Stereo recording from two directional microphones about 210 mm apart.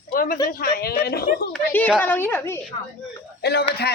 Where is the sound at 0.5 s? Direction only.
45° left (ahead or behind).